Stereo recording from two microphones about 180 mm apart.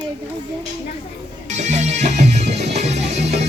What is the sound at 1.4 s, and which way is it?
Music, 40° right (ahead or behind).